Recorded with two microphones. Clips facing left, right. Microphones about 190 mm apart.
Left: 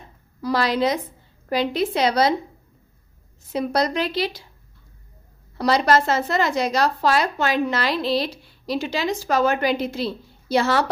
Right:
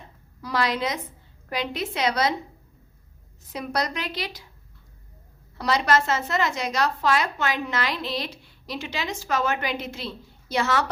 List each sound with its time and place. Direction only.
0.4 s a woman's voice: 30° left (ahead or behind)
3.5 s a woman's voice: 30° left (ahead or behind)
5.5 s a woman's voice: 35° left (ahead or behind)